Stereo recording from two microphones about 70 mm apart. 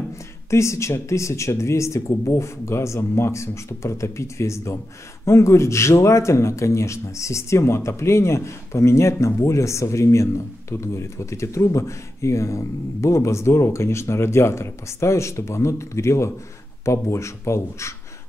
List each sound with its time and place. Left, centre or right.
0.5 s a man's voice: left